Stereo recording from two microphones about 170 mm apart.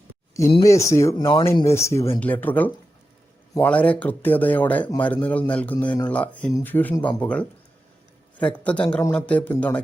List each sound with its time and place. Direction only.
0.6 s speech: 20° left (ahead or behind)
8.6 s speech: 5° left (ahead or behind)